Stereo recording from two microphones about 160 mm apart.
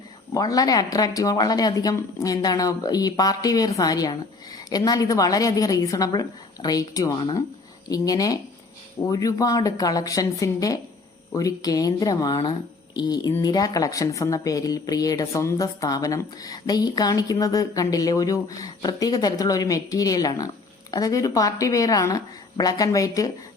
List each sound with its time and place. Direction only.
0.3 s speech: 25° left (ahead or behind)